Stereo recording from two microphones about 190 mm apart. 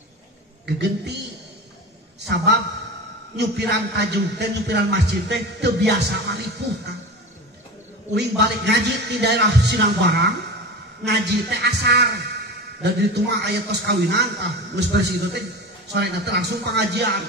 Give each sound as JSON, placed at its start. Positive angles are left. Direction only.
{"t": 0.7, "sound": "a man's voice", "side_deg": -60}
{"t": 2.1, "sound": "a man's voice", "side_deg": -60}
{"t": 8.1, "sound": "a man's voice", "side_deg": -60}